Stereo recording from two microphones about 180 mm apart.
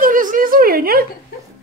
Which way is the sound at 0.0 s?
50° right (ahead or behind).